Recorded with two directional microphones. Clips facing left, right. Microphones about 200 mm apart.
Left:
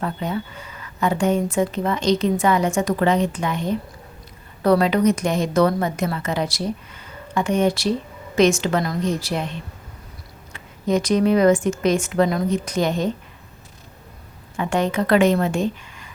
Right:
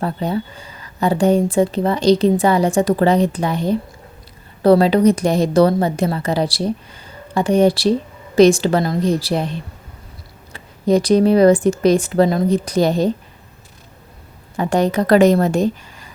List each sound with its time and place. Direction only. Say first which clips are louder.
0.0 s speech: right 4 dB; 35° right (ahead or behind)
14.5 s speech: right 4 dB; 35° right (ahead or behind)